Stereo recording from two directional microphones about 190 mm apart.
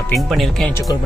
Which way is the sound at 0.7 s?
15° left (ahead or behind).